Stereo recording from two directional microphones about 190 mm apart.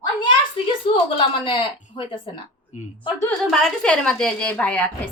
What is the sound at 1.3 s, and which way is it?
A woman's voice, 25° left (ahead or behind).